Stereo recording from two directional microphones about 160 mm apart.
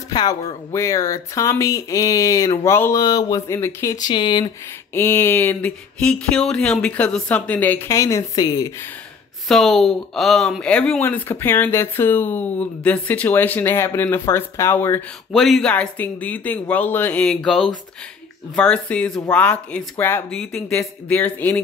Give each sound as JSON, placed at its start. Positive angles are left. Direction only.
{"t": 0.1, "sound": "speech", "side_deg": 25}
{"t": 4.9, "sound": "speech", "side_deg": 15}
{"t": 9.5, "sound": "speech", "side_deg": 0}
{"t": 15.3, "sound": "speech", "side_deg": 0}
{"t": 18.5, "sound": "speech", "side_deg": 5}